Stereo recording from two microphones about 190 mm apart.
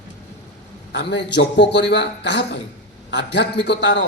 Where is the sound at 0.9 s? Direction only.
70° left (ahead or behind).